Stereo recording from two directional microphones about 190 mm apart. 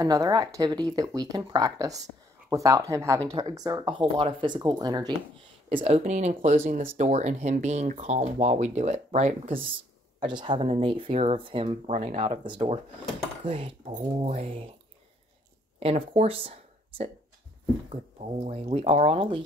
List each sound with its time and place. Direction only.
0.0 s speech: 20° right (ahead or behind); by 9.6 s 35° right (ahead or behind)
10.2 s speech: 25° right (ahead or behind)
15.8 s speech: 30° right (ahead or behind)
18.4 s speech: 30° right (ahead or behind)